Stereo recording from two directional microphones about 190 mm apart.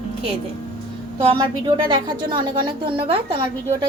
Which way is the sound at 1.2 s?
25° right (ahead or behind).